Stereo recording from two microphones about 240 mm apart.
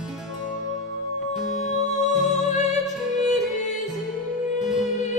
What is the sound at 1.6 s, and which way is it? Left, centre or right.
Music, left.